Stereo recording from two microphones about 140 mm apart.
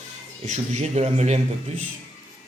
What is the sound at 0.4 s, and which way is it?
A man's voice, 55° right (ahead or behind).